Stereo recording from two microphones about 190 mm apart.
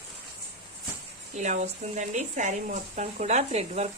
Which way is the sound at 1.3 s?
40° right (ahead or behind).